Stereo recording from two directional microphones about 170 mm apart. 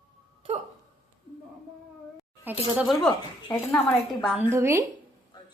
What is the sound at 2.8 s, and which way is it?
Speech, centre (ahead or behind).